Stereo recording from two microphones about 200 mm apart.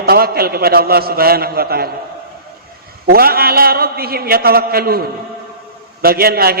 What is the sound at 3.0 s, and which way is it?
A man's voice, 50° right (ahead or behind).